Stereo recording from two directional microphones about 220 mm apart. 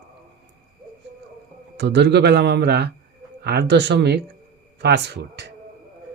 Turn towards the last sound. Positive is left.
turn(degrees=-50)  # may be behind; listen again after turning